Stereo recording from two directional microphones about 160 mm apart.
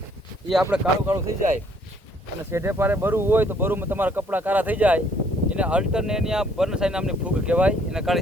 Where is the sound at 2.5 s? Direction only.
15° right (ahead or behind).